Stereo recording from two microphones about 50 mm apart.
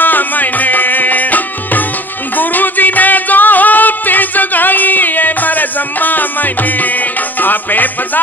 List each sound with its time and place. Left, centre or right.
0.0 s music: left